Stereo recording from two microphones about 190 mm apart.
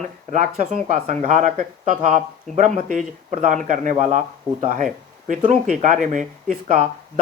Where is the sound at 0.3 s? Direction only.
40° right (ahead or behind).